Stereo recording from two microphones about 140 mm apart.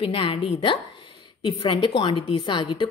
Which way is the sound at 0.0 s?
40° left (ahead or behind).